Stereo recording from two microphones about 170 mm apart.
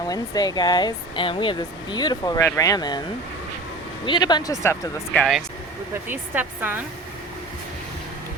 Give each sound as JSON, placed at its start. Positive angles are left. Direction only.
{"t": 0.1, "sound": "speech", "side_deg": 25}
{"t": 4.0, "sound": "speech", "side_deg": 25}
{"t": 5.1, "sound": "speech", "side_deg": 0}
{"t": 5.9, "sound": "a woman's voice", "side_deg": -10}